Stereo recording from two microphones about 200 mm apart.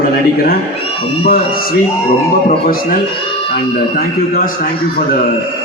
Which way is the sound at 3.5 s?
50° left (ahead or behind).